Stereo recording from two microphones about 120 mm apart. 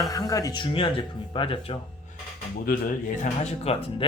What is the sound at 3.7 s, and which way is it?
Speech, 60° left (ahead or behind).